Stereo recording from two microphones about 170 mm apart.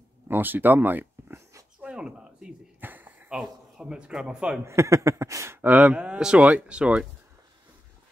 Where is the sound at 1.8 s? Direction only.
5° right (ahead or behind).